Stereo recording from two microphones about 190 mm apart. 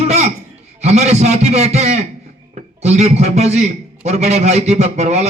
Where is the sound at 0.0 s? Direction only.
35° right (ahead or behind).